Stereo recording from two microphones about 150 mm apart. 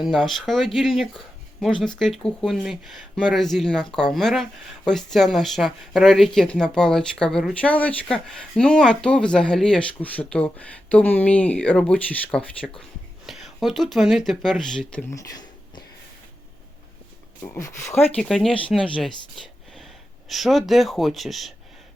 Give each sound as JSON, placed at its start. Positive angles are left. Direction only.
{"t": 0.0, "sound": "speech", "side_deg": 0}
{"t": 15.1, "sound": "a sound", "side_deg": 25}
{"t": 17.5, "sound": "speech", "side_deg": 20}
{"t": 18.2, "sound": "speech", "side_deg": 0}
{"t": 19.7, "sound": "speech", "side_deg": 0}